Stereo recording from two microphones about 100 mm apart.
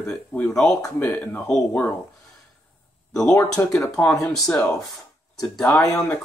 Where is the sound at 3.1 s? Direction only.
5° left (ahead or behind).